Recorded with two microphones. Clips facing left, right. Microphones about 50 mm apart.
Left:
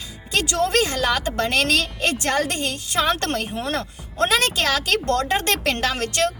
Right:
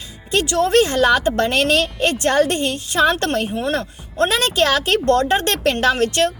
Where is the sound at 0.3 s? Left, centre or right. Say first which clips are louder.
Right 4 dB; right.